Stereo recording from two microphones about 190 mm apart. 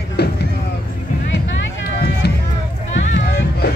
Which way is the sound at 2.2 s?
60° left (ahead or behind).